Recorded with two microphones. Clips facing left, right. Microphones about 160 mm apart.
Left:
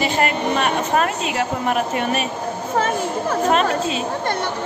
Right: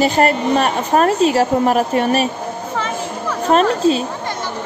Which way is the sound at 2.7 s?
45° left (ahead or behind).